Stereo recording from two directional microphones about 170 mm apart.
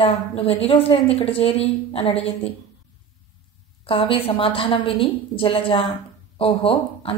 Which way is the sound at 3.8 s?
30° left (ahead or behind).